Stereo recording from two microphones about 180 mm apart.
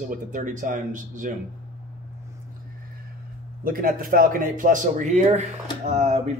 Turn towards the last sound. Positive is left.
turn(degrees=-40)  # may be behind; listen again after turning